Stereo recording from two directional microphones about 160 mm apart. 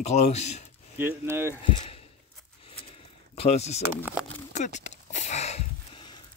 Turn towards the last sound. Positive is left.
turn(degrees=45)  # may be behind; listen again after turning